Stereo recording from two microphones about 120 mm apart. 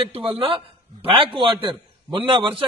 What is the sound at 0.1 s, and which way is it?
A man's voice, 50° right (ahead or behind).